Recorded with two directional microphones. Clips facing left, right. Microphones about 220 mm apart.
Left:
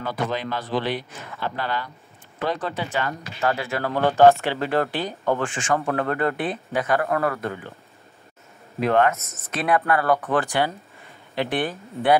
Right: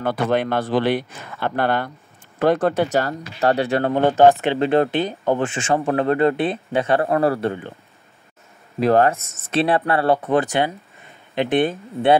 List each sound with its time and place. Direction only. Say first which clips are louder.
0.0 s speech: right 7 dB; 60° right (ahead or behind); by 7.7 s 30° right (ahead or behind)
8.7 s speech: right 4 dB; 35° right (ahead or behind)